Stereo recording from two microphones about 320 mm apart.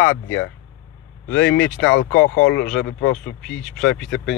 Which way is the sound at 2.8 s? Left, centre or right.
Left.